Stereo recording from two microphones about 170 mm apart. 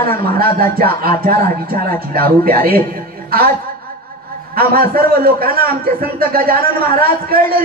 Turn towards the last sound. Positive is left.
turn(degrees=-60)  # may be behind; listen again after turning